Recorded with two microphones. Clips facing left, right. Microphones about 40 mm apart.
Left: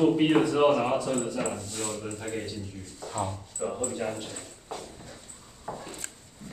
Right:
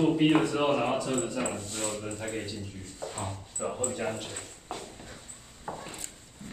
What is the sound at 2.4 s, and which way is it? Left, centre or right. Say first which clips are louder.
Speech: left 1 dB; right.